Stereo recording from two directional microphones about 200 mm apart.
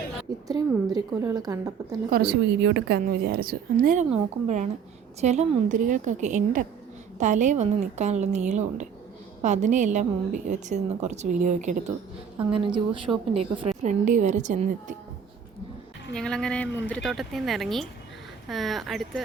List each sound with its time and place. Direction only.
0.4 s a woman's voice: 20° right (ahead or behind)
2.0 s a woman's voice: 50° right (ahead or behind)
12.5 s a woman's voice: 25° right (ahead or behind)
13.6 s a woman's voice: 35° right (ahead or behind)
16.1 s speech: 5° left (ahead or behind)